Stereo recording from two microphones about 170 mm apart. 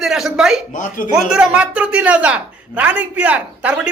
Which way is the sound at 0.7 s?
55° left (ahead or behind).